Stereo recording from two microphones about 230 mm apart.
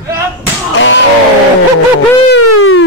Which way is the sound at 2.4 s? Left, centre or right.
Left.